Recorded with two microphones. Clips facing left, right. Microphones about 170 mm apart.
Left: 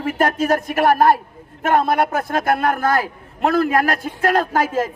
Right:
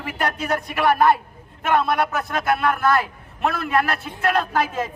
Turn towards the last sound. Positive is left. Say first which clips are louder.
# left 4 dB
turn(degrees=45)  # may be behind; listen again after turning